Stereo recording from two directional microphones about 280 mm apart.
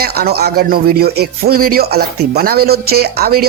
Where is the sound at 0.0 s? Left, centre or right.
Right.